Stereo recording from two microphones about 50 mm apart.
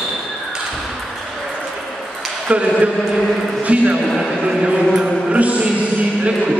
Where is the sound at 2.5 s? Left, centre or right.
Right.